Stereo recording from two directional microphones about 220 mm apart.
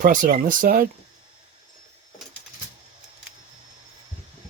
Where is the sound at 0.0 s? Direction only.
35° right (ahead or behind).